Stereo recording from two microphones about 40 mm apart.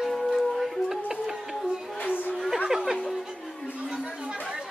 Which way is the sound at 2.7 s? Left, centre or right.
Centre.